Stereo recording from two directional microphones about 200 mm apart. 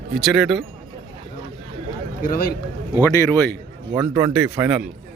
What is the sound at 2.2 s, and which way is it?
Speech, 45° left (ahead or behind).